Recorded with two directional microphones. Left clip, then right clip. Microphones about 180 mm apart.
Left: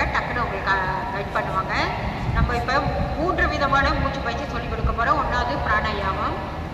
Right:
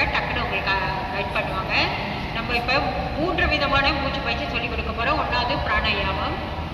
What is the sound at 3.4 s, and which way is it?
Speech, 20° right (ahead or behind).